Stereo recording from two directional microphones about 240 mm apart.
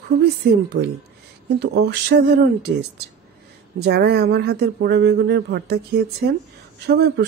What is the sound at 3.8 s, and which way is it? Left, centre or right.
Speech, right.